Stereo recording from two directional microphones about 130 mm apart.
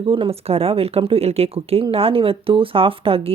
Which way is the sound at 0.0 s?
45° right (ahead or behind).